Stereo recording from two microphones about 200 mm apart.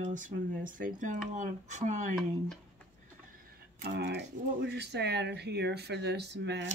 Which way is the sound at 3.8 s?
55° right (ahead or behind).